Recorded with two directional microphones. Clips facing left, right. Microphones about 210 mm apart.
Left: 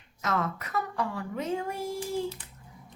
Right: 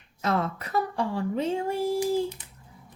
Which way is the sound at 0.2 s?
30° right (ahead or behind).